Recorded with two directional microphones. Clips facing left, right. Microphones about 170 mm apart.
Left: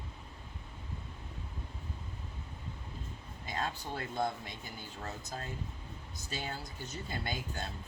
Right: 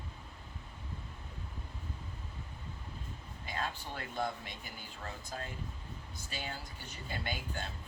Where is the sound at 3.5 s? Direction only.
35° left (ahead or behind).